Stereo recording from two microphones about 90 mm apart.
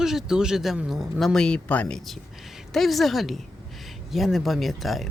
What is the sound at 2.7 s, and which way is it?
Speech, centre (ahead or behind).